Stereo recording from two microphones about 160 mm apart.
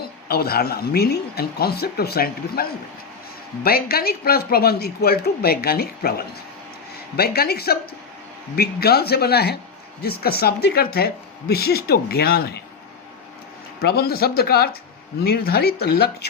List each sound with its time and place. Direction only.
0.3 s speech: 75° left (ahead or behind)
13.8 s speech: 80° left